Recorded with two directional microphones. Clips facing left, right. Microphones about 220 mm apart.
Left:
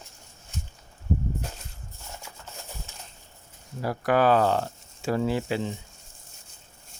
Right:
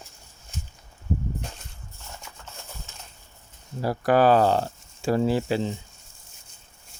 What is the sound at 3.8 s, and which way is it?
Speech, 35° right (ahead or behind).